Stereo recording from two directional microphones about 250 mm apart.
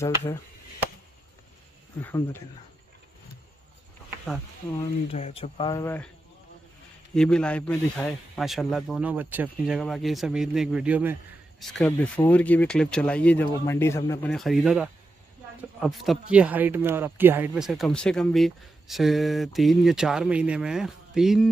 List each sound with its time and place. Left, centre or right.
0.2 s a sound: centre
2.0 s speech: centre
5.1 s speech: left
7.2 s speech: centre